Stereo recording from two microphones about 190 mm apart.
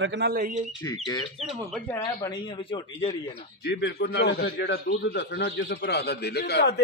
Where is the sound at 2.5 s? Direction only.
25° left (ahead or behind).